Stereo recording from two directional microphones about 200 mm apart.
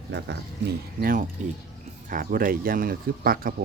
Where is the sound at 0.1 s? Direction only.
60° right (ahead or behind).